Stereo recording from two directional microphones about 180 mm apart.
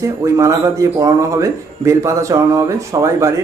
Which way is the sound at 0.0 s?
15° right (ahead or behind).